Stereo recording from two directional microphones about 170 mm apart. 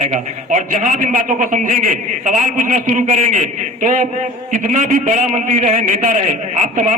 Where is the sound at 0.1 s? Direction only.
45° right (ahead or behind).